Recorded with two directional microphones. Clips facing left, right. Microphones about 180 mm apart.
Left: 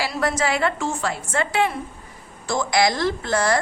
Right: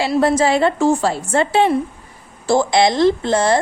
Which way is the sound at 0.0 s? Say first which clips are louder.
Right 8 dB; 30° right (ahead or behind).